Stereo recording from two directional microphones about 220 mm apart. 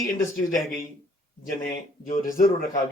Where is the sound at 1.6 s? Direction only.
40° left (ahead or behind).